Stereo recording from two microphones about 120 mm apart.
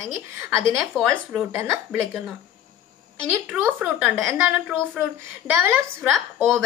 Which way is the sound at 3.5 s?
10° right (ahead or behind).